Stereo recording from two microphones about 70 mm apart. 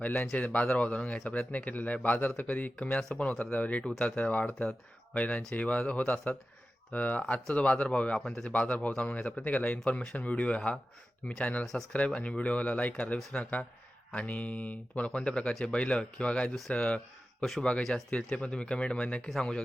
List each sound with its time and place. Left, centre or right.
0.0 s speech: left
8.2 s speech: centre
8.4 s speech: centre
11.6 s speech: centre
11.9 s speech: centre
16.6 s speech: centre